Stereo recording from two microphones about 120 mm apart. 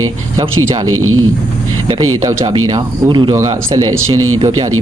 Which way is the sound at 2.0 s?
30° right (ahead or behind).